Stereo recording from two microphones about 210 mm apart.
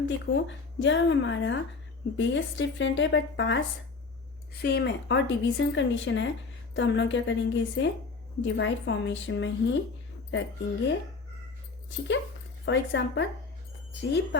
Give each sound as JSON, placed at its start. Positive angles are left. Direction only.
{"t": 0.0, "sound": "a woman's voice", "side_deg": 60}
{"t": 4.6, "sound": "a woman's voice", "side_deg": 50}
{"t": 11.9, "sound": "a woman's voice", "side_deg": 60}